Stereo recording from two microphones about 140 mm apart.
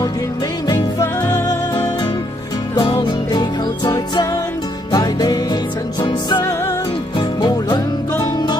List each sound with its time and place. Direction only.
0.7 s music: 25° left (ahead or behind)